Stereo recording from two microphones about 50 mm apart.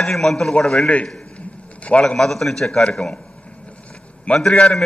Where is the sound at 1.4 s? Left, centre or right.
Left.